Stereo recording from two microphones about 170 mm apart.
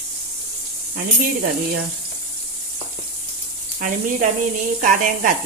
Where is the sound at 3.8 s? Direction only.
50° right (ahead or behind).